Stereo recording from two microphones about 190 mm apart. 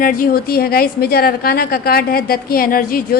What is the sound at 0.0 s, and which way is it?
A woman's voice, 45° left (ahead or behind).